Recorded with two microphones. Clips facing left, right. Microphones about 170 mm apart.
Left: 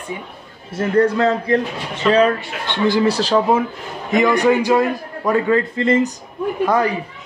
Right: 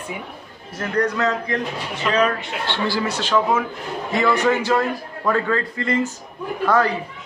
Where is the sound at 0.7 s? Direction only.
30° left (ahead or behind).